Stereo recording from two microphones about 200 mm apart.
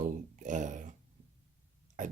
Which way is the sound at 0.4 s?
40° right (ahead or behind).